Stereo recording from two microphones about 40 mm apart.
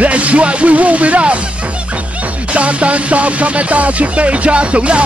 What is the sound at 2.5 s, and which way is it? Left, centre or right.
Music, right.